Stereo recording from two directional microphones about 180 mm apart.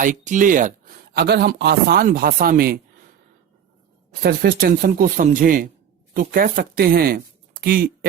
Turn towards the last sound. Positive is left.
turn(degrees=-55)  # may be behind; listen again after turning